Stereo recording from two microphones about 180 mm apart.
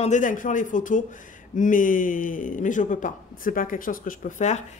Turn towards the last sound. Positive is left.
turn(degrees=40)  # may be behind; listen again after turning